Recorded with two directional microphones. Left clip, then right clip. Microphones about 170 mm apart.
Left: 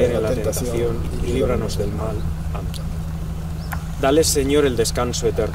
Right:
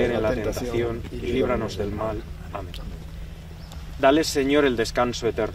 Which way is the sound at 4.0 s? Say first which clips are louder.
Left 2 dB; 5° left (ahead or behind).